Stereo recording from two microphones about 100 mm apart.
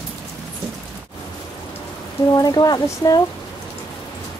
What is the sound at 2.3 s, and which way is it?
Speech, 40° left (ahead or behind).